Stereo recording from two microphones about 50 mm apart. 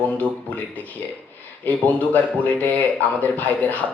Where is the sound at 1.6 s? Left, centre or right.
Left.